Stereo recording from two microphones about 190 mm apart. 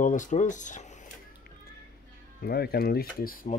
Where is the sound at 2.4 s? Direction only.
55° left (ahead or behind).